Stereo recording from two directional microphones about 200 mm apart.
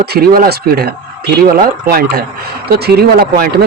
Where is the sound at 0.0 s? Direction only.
50° right (ahead or behind).